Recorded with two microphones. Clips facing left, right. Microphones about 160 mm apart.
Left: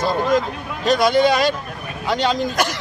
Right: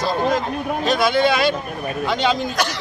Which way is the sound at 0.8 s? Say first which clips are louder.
Left 3 dB; 40° left (ahead or behind).